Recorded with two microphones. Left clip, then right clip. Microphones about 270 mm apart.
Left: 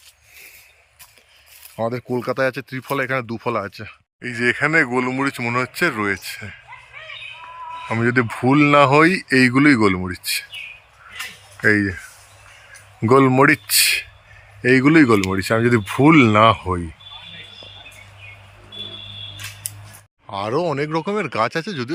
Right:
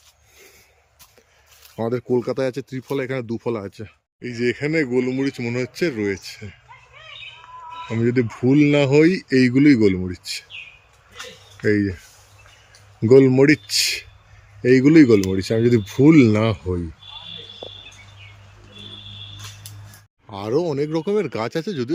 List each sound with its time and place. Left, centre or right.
1.7 s speech: centre
4.9 s speech: left
5.1 s speech: centre
7.9 s speech: centre
11.6 s speech: centre
13.0 s speech: centre
20.2 s speech: centre